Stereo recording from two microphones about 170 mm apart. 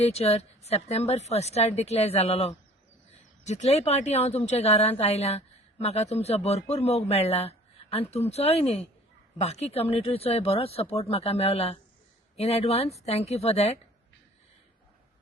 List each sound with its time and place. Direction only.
0.0 s a man's voice: 35° left (ahead or behind)